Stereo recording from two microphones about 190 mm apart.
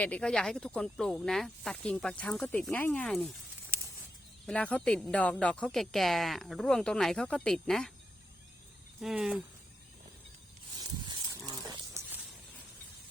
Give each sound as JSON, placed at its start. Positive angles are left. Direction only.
{"t": 0.0, "sound": "speech", "side_deg": 5}
{"t": 4.4, "sound": "speech", "side_deg": 5}
{"t": 9.0, "sound": "speech", "side_deg": 0}
{"t": 10.8, "sound": "a sound", "side_deg": -20}
{"t": 11.9, "sound": "snake", "side_deg": -10}